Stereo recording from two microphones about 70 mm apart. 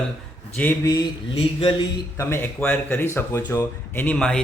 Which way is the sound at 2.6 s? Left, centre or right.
Left.